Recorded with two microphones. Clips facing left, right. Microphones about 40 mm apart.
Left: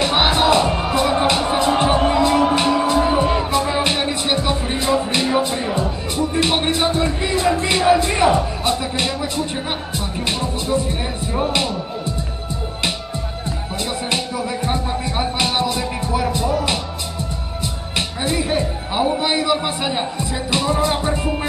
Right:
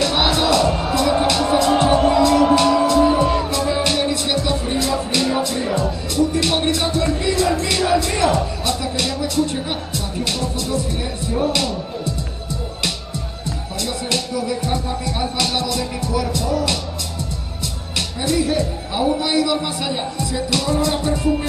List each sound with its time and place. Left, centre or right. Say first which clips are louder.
0.0 s music: left 2 dB; left
13.7 s a man's voice: even; left
17.9 s a man's voice: right 1 dB; left